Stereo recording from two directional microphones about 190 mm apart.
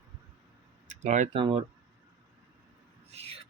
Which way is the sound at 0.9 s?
40° right (ahead or behind).